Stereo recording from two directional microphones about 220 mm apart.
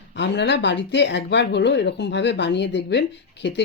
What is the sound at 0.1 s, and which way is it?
Speech, 50° left (ahead or behind).